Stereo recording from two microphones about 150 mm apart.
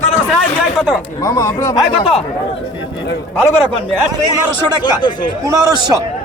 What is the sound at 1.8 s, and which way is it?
Speech, centre (ahead or behind).